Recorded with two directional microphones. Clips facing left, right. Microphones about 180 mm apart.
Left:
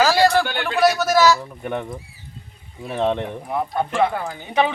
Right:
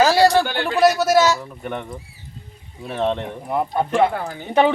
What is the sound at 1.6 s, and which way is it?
Speech, 10° left (ahead or behind).